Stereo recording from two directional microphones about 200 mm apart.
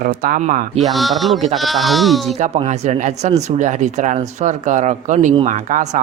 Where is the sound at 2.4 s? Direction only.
35° right (ahead or behind).